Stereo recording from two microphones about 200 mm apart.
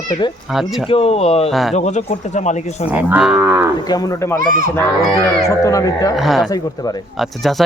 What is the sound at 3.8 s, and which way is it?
Speech, 20° left (ahead or behind).